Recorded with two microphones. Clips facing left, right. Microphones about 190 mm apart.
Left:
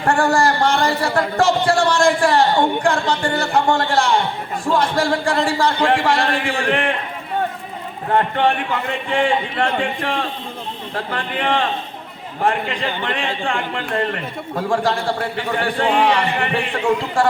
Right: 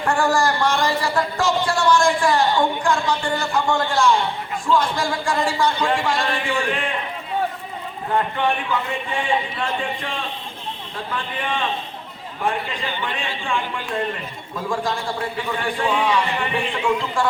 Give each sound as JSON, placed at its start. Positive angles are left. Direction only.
{"t": 0.0, "sound": "a man's voice", "side_deg": 60}
{"t": 8.1, "sound": "a man's voice", "side_deg": 60}